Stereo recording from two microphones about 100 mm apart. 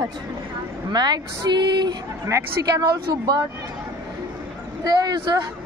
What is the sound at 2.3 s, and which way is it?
Speech, 30° right (ahead or behind).